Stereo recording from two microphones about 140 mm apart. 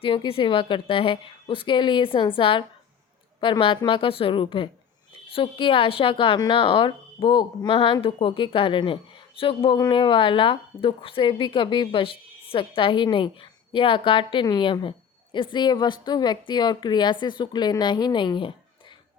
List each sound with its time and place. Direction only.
0.0 s a woman's voice: 40° left (ahead or behind)